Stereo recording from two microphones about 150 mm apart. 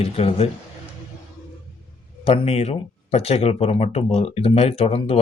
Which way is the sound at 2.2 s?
40° left (ahead or behind).